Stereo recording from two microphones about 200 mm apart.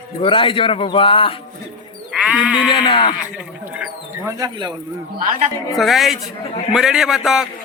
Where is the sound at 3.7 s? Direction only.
5° right (ahead or behind).